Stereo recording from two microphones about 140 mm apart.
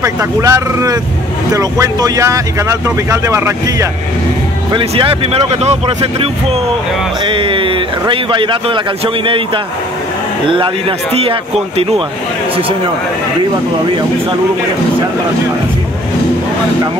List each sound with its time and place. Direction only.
0.0 s speech: 25° right (ahead or behind)
4.7 s a man's voice: 40° right (ahead or behind)